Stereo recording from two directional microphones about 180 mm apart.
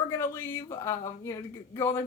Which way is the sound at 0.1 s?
15° left (ahead or behind).